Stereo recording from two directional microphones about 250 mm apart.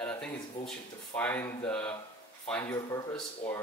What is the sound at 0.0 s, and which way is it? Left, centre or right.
Speech, centre.